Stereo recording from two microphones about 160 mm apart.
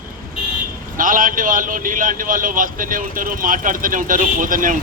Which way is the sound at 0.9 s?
55° right (ahead or behind).